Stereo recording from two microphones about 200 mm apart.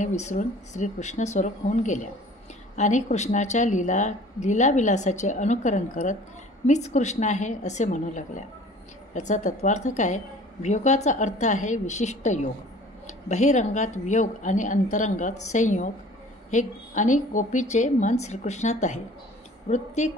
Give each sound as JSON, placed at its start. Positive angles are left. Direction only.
{"t": 0.0, "sound": "a woman's voice", "side_deg": 35}